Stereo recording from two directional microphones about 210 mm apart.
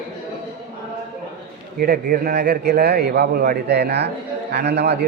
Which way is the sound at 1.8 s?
45° right (ahead or behind).